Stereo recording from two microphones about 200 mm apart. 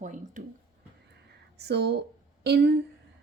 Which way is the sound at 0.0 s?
40° right (ahead or behind).